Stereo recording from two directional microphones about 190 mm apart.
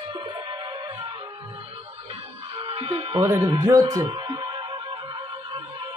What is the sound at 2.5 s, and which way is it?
Music, 30° right (ahead or behind).